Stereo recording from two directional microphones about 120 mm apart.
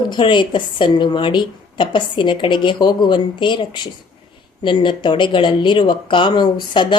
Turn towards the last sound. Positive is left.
turn(degrees=40)  # may be behind; listen again after turning